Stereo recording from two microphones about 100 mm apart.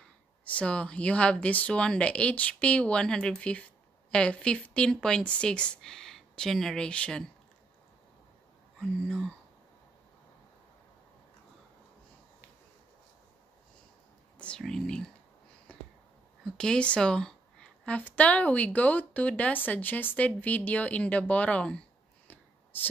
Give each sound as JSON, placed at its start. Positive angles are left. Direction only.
{"t": 0.5, "sound": "a woman's voice", "side_deg": 10}
{"t": 8.7, "sound": "speech", "side_deg": 5}
{"t": 14.6, "sound": "a woman's voice", "side_deg": 5}
{"t": 16.4, "sound": "a woman's voice", "side_deg": 5}
{"t": 22.3, "sound": "a sound", "side_deg": 20}